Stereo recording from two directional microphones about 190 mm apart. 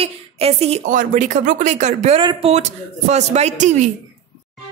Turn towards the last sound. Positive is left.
turn(degrees=-40)  # may be behind; listen again after turning